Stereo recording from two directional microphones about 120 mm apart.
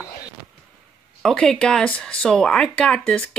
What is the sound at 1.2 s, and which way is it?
Speech, 5° left (ahead or behind).